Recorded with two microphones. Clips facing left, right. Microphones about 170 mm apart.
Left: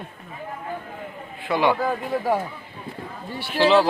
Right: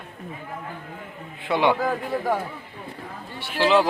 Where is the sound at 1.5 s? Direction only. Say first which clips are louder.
Even; 20° right (ahead or behind).